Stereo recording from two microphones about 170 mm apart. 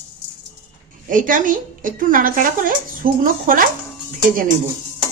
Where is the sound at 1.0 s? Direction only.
50° right (ahead or behind).